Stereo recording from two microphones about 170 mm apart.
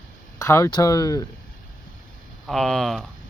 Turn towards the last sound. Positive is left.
turn(degrees=0)  # may be behind; listen again after turning